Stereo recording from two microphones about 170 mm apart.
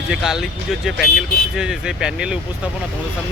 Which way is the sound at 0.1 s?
Centre (ahead or behind).